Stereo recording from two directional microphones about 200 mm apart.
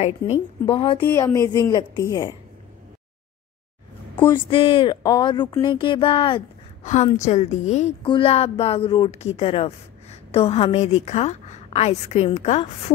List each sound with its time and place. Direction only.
0.0 s speech: 30° left (ahead or behind)
1.1 s a woman's voice: 15° left (ahead or behind)
4.5 s a woman's voice: 25° left (ahead or behind)